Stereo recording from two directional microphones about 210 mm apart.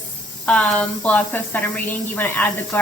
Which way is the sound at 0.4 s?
5° left (ahead or behind).